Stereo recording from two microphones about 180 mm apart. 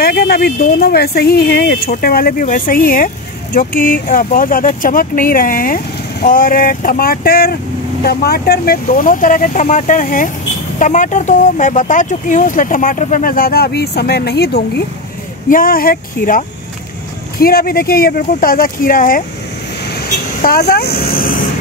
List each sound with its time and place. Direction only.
0.0 s speech: 60° left (ahead or behind)
15.5 s speech: 55° left (ahead or behind)
20.4 s speech: 60° left (ahead or behind)